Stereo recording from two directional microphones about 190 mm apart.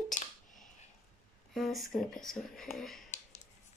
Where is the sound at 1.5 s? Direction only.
Centre (ahead or behind).